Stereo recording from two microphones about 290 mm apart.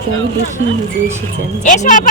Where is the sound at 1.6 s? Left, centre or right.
Left.